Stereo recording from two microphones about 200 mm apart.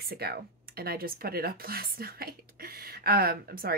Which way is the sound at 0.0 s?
50° right (ahead or behind).